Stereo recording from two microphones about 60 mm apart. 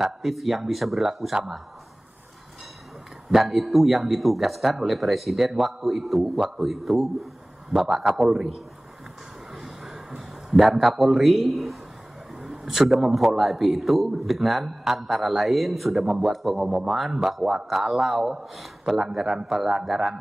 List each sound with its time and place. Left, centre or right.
0.0 s a man's voice: centre
3.3 s a man's voice: centre
9.6 s a sound: centre
12.4 s a man's voice: centre